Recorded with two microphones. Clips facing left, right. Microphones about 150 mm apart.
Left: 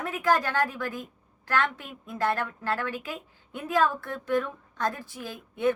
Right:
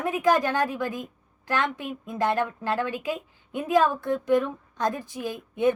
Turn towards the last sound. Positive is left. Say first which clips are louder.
# right 4 dB
turn(degrees=-20)  # may be behind; listen again after turning